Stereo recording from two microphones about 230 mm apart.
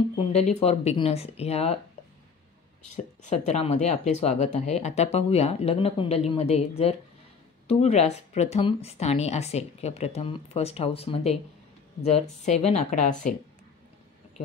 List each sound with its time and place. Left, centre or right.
0.2 s speech: left
3.3 s speech: left